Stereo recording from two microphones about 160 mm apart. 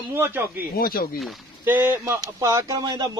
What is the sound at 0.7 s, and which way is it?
Speech, 65° left (ahead or behind).